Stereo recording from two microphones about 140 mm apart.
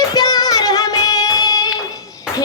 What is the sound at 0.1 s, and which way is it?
Child singing, 30° left (ahead or behind).